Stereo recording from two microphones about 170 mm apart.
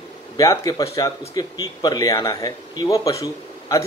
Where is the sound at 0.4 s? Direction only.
20° left (ahead or behind).